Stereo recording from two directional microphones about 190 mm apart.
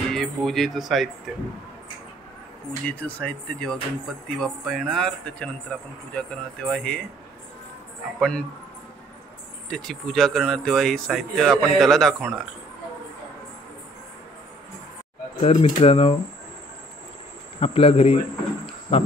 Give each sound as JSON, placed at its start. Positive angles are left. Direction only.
{"t": 0.1, "sound": "speech", "side_deg": 0}
{"t": 2.9, "sound": "speech", "side_deg": 5}
{"t": 8.2, "sound": "speech", "side_deg": 5}
{"t": 9.7, "sound": "speech", "side_deg": 0}
{"t": 15.4, "sound": "speech", "side_deg": 30}
{"t": 17.6, "sound": "speech", "side_deg": 30}